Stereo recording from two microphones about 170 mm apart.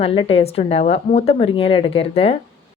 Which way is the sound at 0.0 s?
35° left (ahead or behind).